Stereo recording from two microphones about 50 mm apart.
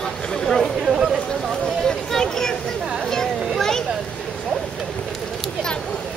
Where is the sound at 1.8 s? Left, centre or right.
Centre.